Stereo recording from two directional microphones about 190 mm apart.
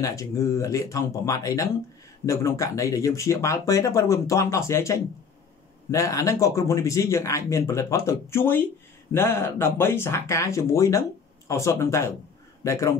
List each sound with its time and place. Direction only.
0.0 s speech: 15° left (ahead or behind)